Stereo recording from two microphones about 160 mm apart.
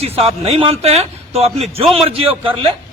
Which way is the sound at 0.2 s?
40° right (ahead or behind).